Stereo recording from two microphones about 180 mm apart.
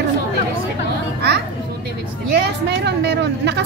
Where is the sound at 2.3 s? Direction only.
65° right (ahead or behind).